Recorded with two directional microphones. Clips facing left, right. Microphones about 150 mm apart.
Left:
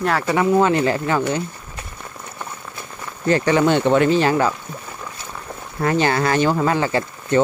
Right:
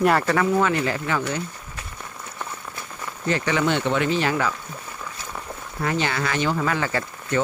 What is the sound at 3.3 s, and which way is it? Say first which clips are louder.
Speech: left 6 dB; 40° left (ahead or behind).